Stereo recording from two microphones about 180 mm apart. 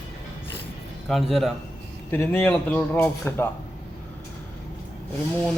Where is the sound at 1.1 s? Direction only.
Centre (ahead or behind).